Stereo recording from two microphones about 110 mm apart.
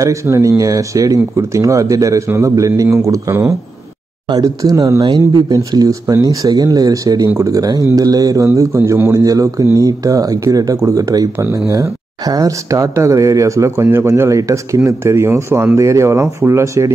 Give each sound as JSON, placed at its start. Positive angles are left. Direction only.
{"t": 0.0, "sound": "a man's voice", "side_deg": -30}